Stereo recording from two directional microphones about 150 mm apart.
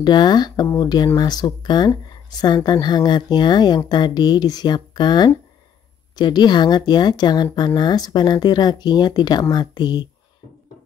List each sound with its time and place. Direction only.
0.0 s speech: 30° left (ahead or behind)